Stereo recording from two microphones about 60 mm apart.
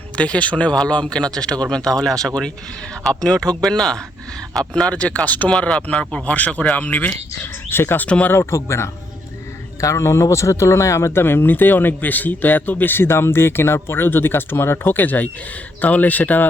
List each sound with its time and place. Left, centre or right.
0.2 s speech: left; by 4.9 s centre
4.9 s speech: left
7.7 s speech: left
8.0 s speech: left
8.3 s speech: left